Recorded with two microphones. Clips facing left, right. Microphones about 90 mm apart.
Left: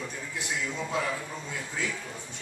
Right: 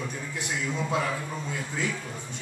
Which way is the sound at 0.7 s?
10° right (ahead or behind).